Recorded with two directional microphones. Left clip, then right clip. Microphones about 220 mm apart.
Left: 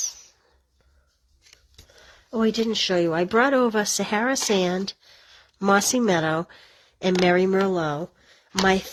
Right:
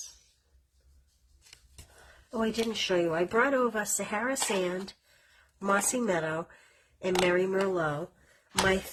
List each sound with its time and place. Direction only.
2.3 s speech: 40° left (ahead or behind)